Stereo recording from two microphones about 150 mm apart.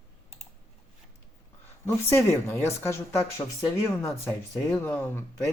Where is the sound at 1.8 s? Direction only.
15° left (ahead or behind).